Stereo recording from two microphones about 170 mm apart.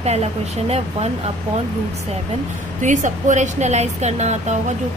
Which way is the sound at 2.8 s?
45° right (ahead or behind).